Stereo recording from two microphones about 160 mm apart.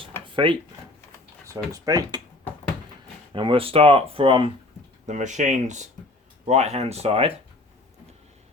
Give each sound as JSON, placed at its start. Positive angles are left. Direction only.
{"t": 0.4, "sound": "speech", "side_deg": -35}
{"t": 1.5, "sound": "speech", "side_deg": -20}
{"t": 3.3, "sound": "speech", "side_deg": -35}
{"t": 5.0, "sound": "speech", "side_deg": -50}